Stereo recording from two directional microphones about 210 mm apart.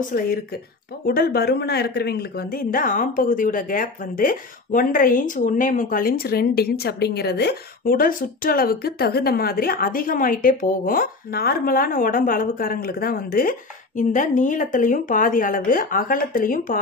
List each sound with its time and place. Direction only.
0.0 s speech: 45° left (ahead or behind)